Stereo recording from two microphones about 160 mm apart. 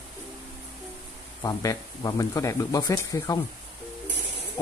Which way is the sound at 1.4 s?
20° left (ahead or behind).